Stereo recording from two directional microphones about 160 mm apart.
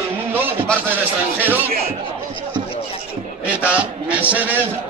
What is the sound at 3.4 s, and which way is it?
A man's voice, 10° right (ahead or behind).